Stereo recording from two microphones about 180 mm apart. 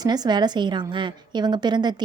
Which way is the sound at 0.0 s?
20° right (ahead or behind).